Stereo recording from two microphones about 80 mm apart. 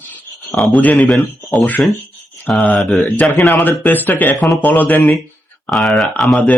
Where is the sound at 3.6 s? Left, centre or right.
Left.